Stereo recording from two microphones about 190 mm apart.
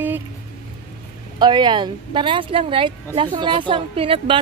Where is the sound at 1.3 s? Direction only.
25° right (ahead or behind).